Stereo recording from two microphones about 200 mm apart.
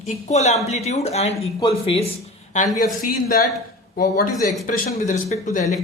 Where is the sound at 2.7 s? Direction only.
45° left (ahead or behind).